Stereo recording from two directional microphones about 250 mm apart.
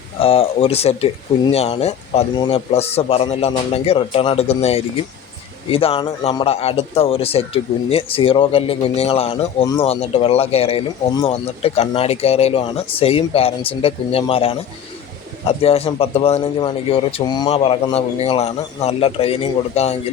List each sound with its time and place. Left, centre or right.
0.2 s speech: left